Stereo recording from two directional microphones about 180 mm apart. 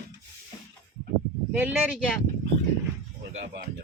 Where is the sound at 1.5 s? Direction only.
10° right (ahead or behind).